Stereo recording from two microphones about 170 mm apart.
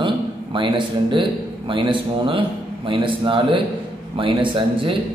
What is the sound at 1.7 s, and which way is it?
A man's voice, 30° right (ahead or behind).